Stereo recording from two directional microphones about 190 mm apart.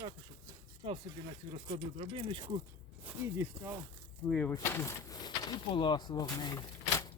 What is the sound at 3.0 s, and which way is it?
Speech, 10° right (ahead or behind).